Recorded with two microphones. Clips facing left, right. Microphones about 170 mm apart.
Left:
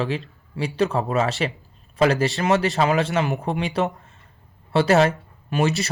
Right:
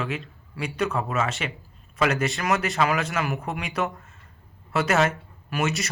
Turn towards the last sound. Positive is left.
turn(degrees=35)  # may be behind; listen again after turning